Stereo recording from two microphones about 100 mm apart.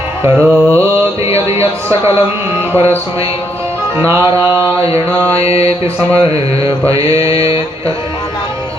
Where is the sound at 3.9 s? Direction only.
25° right (ahead or behind).